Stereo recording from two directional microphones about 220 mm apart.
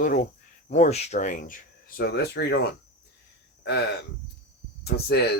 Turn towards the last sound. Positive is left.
turn(degrees=50)  # may be behind; listen again after turning